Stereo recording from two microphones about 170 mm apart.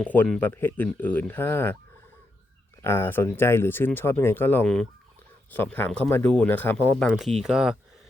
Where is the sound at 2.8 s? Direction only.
15° left (ahead or behind); by 7.8 s 5° right (ahead or behind).